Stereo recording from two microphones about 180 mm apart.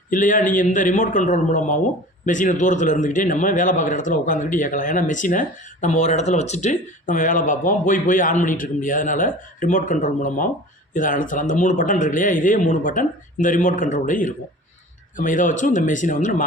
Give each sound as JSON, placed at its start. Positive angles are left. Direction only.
{"t": 0.1, "sound": "a man's voice", "side_deg": 45}